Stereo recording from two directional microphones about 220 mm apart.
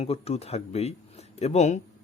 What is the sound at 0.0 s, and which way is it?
Speech, 30° left (ahead or behind).